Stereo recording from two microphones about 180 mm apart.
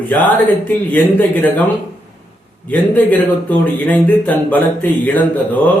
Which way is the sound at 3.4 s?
10° left (ahead or behind).